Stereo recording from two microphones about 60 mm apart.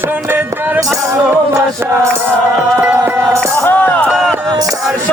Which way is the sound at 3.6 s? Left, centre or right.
Left.